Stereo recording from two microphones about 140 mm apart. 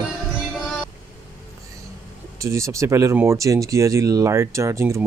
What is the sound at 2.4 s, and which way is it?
Speech, 20° right (ahead or behind).